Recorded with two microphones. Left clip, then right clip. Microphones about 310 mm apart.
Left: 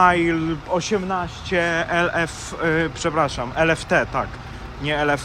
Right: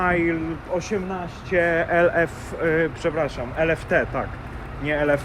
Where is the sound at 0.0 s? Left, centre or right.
Centre.